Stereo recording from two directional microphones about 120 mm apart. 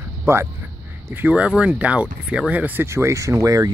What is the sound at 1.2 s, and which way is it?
Speech, 10° right (ahead or behind).